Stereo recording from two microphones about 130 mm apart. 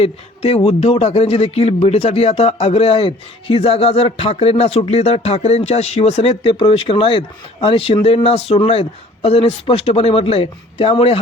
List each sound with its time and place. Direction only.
0.0 s speech: 50° left (ahead or behind)